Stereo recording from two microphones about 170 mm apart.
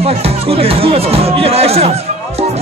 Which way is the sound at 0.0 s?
35° right (ahead or behind).